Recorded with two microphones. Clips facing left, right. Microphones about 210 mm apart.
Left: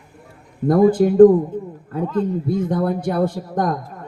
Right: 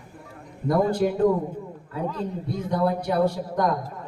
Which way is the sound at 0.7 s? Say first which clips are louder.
Left 7 dB; 50° left (ahead or behind).